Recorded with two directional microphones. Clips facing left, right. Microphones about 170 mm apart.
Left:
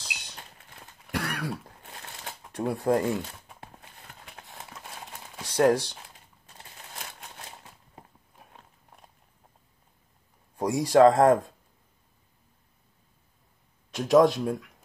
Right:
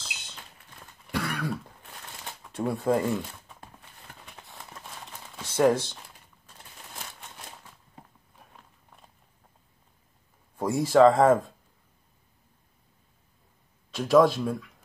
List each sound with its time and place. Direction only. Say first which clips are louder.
0.0 s a sound: left 1 dB; 15° left (ahead or behind)
1.1 s throat clearing: right 1 dB; 15° left (ahead or behind)
2.5 s speech: even; 15° left (ahead or behind)
2.9 s speech: left 1 dB; 5° right (ahead or behind)
5.3 s a sound: even; 15° left (ahead or behind)
5.7 s speech: left 1 dB; 15° left (ahead or behind)
10.6 s speech: even; 15° left (ahead or behind)
14.2 s speech: left 1 dB; 15° left (ahead or behind)